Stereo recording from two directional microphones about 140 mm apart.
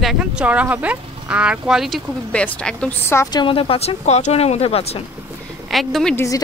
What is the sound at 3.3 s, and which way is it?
Speech, 40° left (ahead or behind).